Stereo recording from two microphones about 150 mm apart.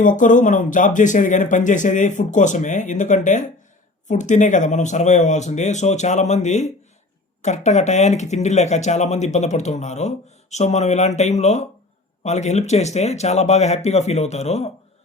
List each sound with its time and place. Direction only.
0.0 s speech: 60° left (ahead or behind)